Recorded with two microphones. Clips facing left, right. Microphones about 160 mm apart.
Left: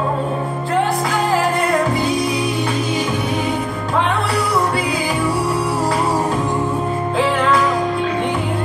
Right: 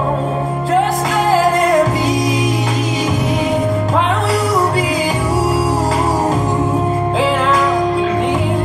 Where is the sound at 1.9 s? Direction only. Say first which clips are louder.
Right 2 dB; 90° right.